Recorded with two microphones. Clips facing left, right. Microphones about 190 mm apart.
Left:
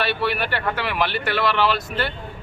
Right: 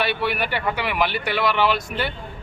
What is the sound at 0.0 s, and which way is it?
Speech, 15° right (ahead or behind).